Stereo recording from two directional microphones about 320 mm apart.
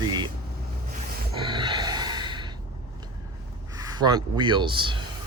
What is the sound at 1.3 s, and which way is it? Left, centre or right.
Gasp, centre.